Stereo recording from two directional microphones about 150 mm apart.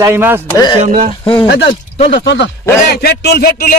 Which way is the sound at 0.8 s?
60° right (ahead or behind).